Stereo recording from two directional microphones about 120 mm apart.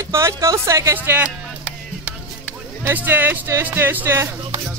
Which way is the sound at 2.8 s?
15° right (ahead or behind).